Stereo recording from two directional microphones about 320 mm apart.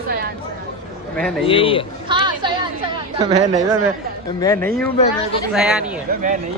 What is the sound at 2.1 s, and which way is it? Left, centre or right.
Speech, centre.